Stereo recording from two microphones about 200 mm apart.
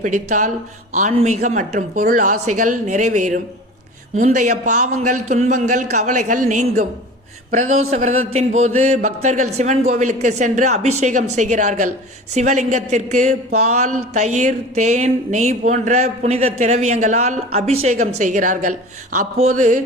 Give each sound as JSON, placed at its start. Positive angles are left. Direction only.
{"t": 0.0, "sound": "speech", "side_deg": -40}